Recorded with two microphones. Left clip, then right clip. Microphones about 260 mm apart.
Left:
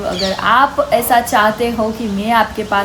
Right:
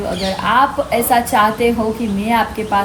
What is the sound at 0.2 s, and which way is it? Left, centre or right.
A woman's voice, centre.